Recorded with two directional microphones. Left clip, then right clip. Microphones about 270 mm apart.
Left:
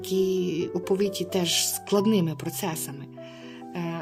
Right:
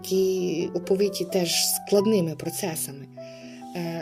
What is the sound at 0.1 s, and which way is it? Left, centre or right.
Speech, centre.